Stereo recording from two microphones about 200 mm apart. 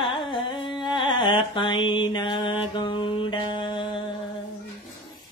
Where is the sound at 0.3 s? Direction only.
25° left (ahead or behind).